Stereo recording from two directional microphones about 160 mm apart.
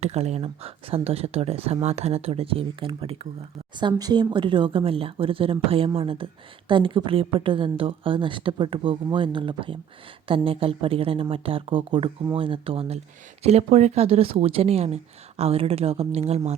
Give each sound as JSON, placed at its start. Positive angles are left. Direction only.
{"t": 0.0, "sound": "speech", "side_deg": -40}